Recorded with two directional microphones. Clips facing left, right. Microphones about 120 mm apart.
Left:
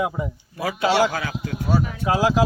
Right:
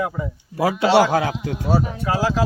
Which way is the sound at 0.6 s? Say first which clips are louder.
Right 7 dB; 90° right.